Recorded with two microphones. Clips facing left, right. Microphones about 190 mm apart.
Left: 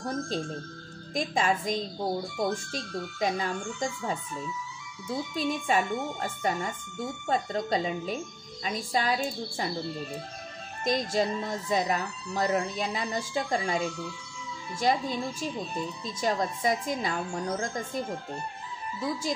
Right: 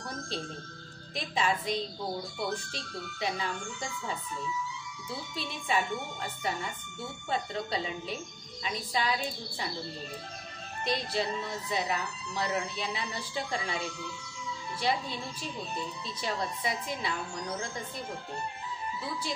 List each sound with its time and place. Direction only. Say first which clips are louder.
1.1 s speech: left 4 dB; 45° left (ahead or behind)
10.8 s speech: left 5 dB; 45° left (ahead or behind)
16.2 s speech: left 6 dB; 45° left (ahead or behind)